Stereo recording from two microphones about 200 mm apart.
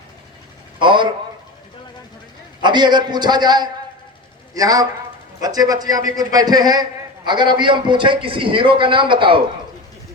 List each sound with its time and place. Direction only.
0.8 s speech: 25° right (ahead or behind)
2.6 s a man's voice: 20° right (ahead or behind)